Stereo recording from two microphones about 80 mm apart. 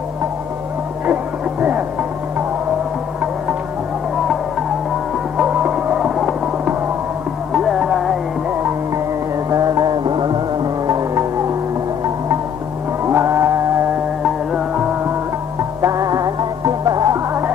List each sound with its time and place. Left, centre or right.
1.0 s music: right
5.4 s music: centre
9.5 s music: right
10.9 s music: right
13.0 s music: right
15.8 s music: right